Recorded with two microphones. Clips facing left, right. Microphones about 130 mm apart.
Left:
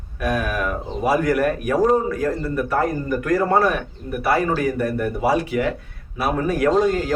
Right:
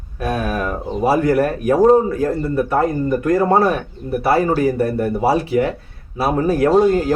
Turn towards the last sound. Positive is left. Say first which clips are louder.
# right 4 dB
turn(degrees=-30)  # may be behind; listen again after turning